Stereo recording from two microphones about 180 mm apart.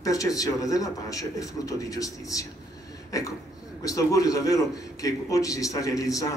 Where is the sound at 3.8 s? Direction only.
20° left (ahead or behind).